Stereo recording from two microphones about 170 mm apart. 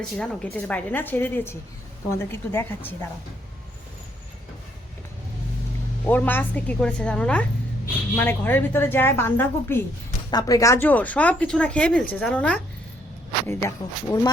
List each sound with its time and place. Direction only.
0.2 s speech: 10° left (ahead or behind)
6.1 s speech: 10° left (ahead or behind)
13.5 s speech: 15° left (ahead or behind)